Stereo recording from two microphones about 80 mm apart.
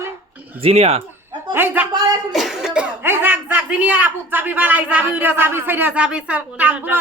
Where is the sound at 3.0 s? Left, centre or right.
Right.